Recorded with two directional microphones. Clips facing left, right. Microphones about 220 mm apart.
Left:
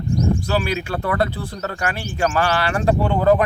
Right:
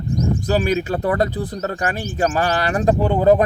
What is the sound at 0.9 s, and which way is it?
Speech, 20° right (ahead or behind).